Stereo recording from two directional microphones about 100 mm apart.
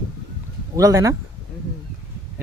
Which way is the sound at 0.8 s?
35° right (ahead or behind).